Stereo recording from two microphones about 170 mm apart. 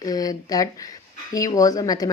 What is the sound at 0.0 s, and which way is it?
Speech, 20° left (ahead or behind).